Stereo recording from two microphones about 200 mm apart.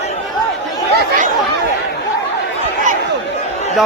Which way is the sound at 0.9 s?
45° right (ahead or behind).